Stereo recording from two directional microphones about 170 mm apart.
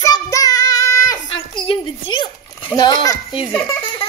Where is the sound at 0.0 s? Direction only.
20° left (ahead or behind).